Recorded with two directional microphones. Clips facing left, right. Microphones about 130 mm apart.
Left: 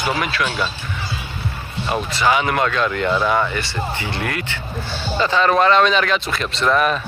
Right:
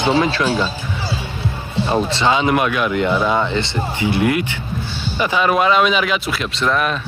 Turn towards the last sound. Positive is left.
turn(degrees=0)  # may be behind; listen again after turning